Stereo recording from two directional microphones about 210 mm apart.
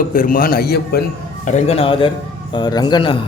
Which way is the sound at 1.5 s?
30° left (ahead or behind).